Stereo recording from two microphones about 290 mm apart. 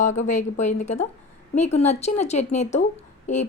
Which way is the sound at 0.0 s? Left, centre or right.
Left.